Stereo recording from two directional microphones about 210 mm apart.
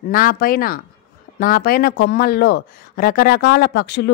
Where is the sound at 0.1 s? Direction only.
45° left (ahead or behind).